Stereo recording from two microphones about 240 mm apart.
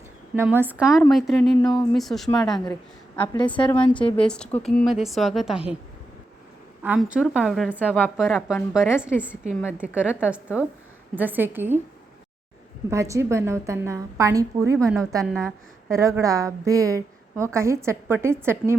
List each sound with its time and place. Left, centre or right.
0.3 s a woman's voice: centre
6.8 s a woman's voice: centre
12.9 s a woman's voice: centre
15.2 s a woman's voice: centre
15.9 s a woman's voice: centre